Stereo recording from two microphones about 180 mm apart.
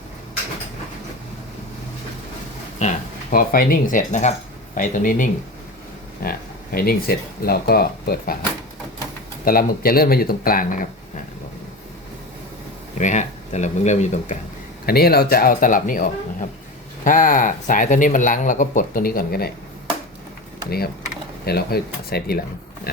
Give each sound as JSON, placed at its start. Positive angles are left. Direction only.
{"t": 2.8, "sound": "speech", "side_deg": 40}
{"t": 3.3, "sound": "speech", "side_deg": 55}
{"t": 9.4, "sound": "speech", "side_deg": 55}
{"t": 13.0, "sound": "speech", "side_deg": 40}
{"t": 14.8, "sound": "speech", "side_deg": 60}
{"t": 20.7, "sound": "speech", "side_deg": 60}